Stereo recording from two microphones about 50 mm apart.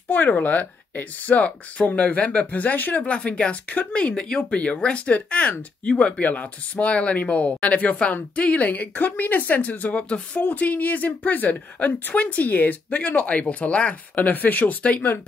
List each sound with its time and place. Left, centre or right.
0.1 s a woman's voice: left
3.0 s speech: left
4.1 s speech: centre; by 10.0 s left
10.0 s speech: left
10.4 s a woman's voice: left